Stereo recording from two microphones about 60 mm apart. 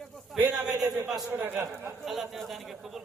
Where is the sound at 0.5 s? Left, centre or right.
Centre.